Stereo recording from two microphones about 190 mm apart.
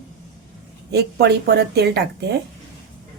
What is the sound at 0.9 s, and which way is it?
A woman's voice, 60° right (ahead or behind).